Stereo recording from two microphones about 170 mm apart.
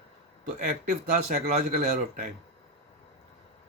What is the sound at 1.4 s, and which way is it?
Speech, 60° right (ahead or behind).